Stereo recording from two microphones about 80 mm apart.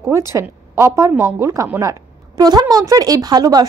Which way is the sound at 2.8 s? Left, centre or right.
Right.